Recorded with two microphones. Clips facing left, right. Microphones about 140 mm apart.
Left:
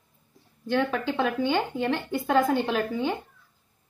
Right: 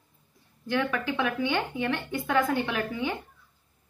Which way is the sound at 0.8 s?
30° left (ahead or behind).